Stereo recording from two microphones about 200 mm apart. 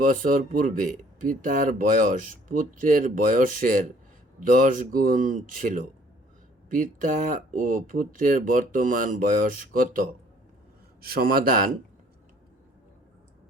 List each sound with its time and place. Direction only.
0.0 s a man's voice: 40° right (ahead or behind)